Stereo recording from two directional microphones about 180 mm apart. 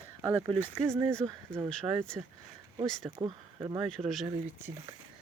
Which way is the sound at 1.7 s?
5° left (ahead or behind).